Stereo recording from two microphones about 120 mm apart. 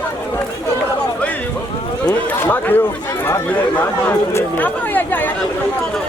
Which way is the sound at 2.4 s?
15° left (ahead or behind).